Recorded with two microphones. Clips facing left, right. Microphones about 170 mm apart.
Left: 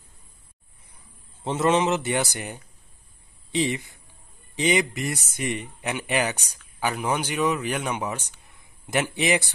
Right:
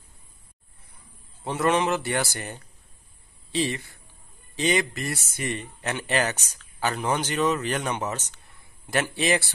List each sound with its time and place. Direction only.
1.4 s a man's voice: 20° left (ahead or behind)